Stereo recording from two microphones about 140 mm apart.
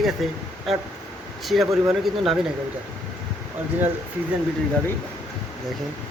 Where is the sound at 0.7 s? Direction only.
Centre (ahead or behind).